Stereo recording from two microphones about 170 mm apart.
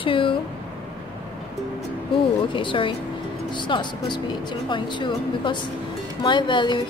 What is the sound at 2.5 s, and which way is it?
A woman's voice, 30° left (ahead or behind).